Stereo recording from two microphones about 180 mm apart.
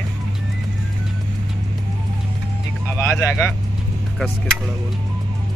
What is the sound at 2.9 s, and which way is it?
Speech, 15° left (ahead or behind).